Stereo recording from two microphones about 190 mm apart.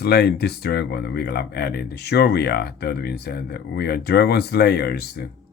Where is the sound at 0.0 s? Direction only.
55° left (ahead or behind).